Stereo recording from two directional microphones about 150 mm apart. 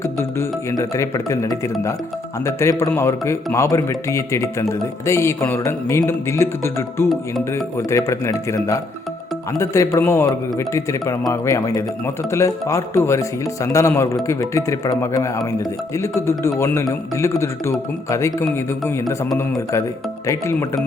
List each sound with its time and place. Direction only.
0.3 s speech: 20° left (ahead or behind)